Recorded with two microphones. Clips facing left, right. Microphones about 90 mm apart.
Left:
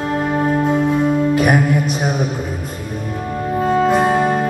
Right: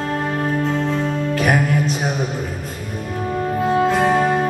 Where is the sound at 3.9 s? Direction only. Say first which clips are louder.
Left 3 dB; 15° left (ahead or behind).